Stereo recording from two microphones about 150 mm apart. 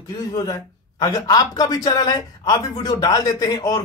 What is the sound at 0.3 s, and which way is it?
Speech, 25° left (ahead or behind).